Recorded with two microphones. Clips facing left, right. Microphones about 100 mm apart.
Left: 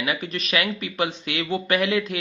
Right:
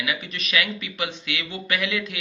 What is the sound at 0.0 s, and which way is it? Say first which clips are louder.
Speech: left 3 dB; 40° left (ahead or behind).